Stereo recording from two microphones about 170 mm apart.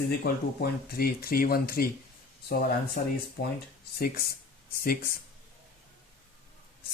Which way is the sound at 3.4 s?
70° left (ahead or behind).